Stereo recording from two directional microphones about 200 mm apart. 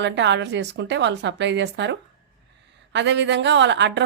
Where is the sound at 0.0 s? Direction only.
60° right (ahead or behind).